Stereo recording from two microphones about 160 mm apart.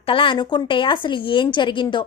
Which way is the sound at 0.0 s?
35° left (ahead or behind).